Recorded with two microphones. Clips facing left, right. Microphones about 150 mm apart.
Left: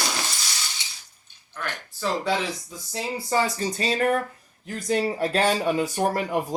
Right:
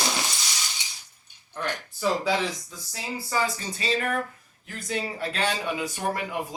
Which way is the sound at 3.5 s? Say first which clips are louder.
Left 4 dB; 40° left (ahead or behind).